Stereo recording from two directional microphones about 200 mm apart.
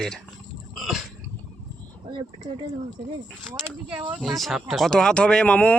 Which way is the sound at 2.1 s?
25° right (ahead or behind).